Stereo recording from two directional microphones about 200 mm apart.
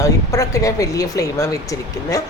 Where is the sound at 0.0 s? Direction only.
15° left (ahead or behind).